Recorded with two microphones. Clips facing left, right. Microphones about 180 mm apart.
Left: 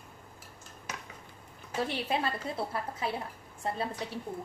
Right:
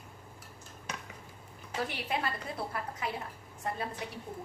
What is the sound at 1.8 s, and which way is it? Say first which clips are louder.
A woman's voice: left 3 dB; 30° left (ahead or behind).